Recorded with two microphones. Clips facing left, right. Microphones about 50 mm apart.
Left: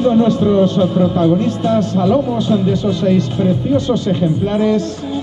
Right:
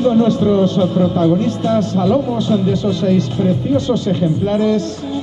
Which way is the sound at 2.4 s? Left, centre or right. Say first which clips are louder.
Left 1 dB; left.